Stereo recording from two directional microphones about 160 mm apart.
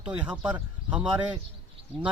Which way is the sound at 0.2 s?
5° right (ahead or behind).